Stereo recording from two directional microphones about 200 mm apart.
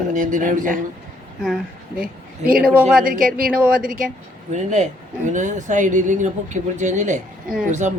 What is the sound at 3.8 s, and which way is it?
Speech, 45° right (ahead or behind).